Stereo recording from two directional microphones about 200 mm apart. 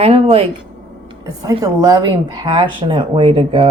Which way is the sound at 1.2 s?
15° right (ahead or behind).